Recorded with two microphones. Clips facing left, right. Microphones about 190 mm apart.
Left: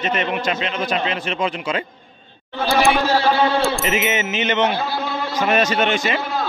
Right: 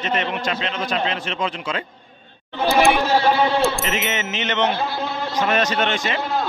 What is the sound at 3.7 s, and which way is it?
A man's voice, 5° left (ahead or behind).